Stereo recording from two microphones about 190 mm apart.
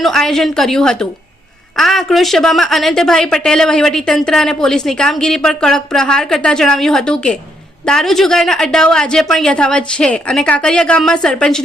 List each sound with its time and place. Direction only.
0.0 s a woman's voice: centre (ahead or behind)